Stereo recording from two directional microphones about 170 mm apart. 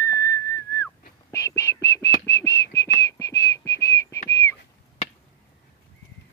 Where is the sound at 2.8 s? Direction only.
15° left (ahead or behind).